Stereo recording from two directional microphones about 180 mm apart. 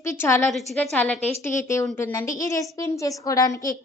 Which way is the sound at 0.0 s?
15° left (ahead or behind).